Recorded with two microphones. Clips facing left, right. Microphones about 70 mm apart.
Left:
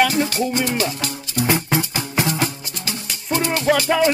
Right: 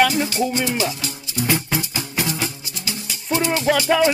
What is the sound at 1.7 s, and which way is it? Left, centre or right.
Music, left.